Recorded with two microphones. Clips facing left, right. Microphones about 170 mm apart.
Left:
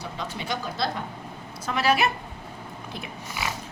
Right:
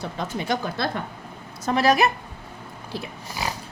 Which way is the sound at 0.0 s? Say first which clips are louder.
Right 4 dB; 50° right (ahead or behind).